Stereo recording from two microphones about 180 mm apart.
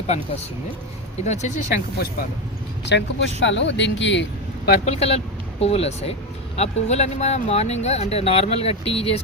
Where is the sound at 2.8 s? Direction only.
80° left.